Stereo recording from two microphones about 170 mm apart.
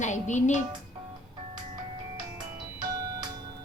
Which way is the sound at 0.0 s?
45° left (ahead or behind).